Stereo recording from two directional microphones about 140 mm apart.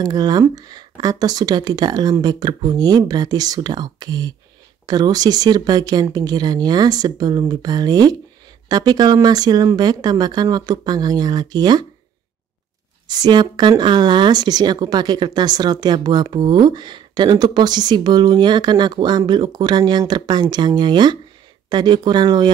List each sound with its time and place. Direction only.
0.0 s speech: 30° right (ahead or behind)
13.1 s speech: 30° right (ahead or behind)